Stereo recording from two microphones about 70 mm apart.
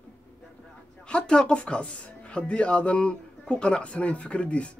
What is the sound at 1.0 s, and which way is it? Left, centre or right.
Speech, centre.